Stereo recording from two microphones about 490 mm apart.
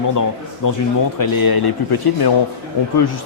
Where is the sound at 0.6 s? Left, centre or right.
Left.